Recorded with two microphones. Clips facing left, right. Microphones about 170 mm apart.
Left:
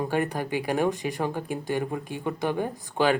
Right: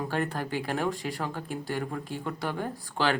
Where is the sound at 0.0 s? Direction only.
15° left (ahead or behind).